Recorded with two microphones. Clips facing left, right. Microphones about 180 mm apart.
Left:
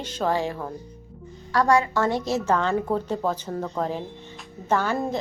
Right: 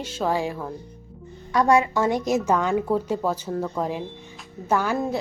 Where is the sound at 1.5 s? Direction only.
20° right (ahead or behind); by 5.2 s 5° right (ahead or behind).